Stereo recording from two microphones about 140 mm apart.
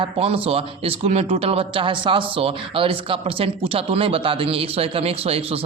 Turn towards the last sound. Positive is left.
turn(degrees=-45)  # may be behind; listen again after turning